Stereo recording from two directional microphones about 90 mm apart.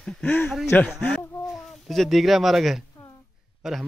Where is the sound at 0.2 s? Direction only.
20° left (ahead or behind).